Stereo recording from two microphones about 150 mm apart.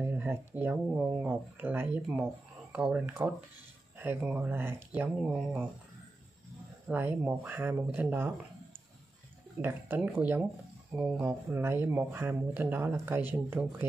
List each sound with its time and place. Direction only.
0.0 s a sound: 15° right (ahead or behind)
2.7 s speech: 10° right (ahead or behind)
6.9 s speech: 15° right (ahead or behind)
9.6 s speech: 15° right (ahead or behind)